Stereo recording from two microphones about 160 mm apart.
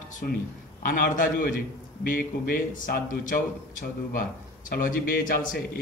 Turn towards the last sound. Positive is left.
turn(degrees=60)  # may be behind; listen again after turning